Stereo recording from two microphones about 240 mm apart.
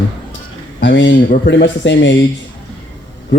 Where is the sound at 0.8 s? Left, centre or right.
Left.